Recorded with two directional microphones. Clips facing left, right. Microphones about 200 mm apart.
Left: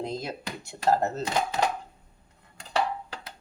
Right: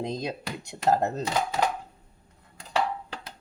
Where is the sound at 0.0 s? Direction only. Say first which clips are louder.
Right 2 dB; 15° right (ahead or behind).